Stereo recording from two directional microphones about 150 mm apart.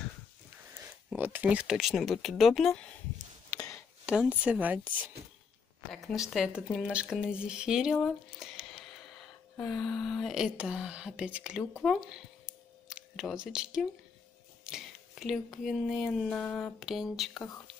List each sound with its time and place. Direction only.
1.1 s speech: 10° right (ahead or behind)
3.5 s a sound: 20° left (ahead or behind)
4.0 s speech: 5° right (ahead or behind)
5.9 s speech: centre (ahead or behind)
11.8 s a sound: 5° right (ahead or behind)
14.6 s speech: 5° right (ahead or behind)